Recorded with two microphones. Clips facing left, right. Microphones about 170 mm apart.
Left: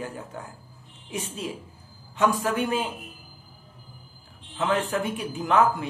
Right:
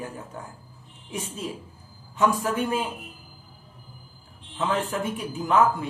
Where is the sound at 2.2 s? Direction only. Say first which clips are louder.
Even; 75° left (ahead or behind).